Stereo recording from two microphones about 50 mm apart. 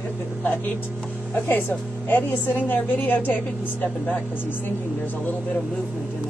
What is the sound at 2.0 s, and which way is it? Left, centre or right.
A woman's voice, left.